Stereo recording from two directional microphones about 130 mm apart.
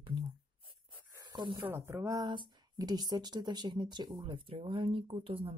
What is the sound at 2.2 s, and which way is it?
Speech, 35° right (ahead or behind).